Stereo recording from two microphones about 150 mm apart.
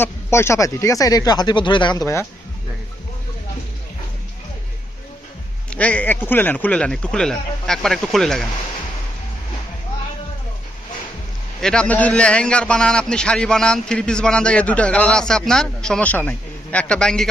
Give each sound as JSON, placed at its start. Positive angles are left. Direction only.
{"t": 0.0, "sound": "speech", "side_deg": 15}
{"t": 5.7, "sound": "speech", "side_deg": 10}
{"t": 11.6, "sound": "a man's voice", "side_deg": 5}